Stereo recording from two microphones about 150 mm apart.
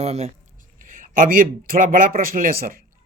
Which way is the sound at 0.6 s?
65° right (ahead or behind).